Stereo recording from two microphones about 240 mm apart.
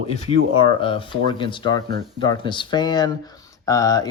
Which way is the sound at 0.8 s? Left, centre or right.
Left.